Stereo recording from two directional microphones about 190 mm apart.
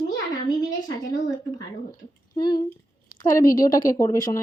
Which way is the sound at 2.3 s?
25° left (ahead or behind).